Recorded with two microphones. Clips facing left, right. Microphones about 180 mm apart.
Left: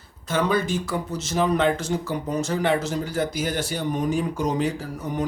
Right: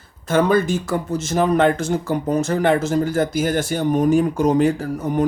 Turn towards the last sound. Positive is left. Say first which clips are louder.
# right 7 dB
turn(degrees=-50)  # may be behind; listen again after turning